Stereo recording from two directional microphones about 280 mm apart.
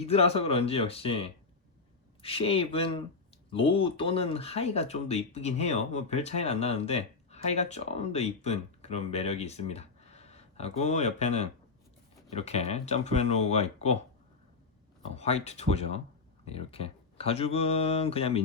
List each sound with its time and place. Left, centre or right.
0.0 s speech: left
15.1 s speech: left